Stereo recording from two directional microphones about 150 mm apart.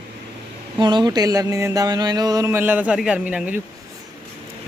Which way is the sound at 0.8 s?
30° right (ahead or behind).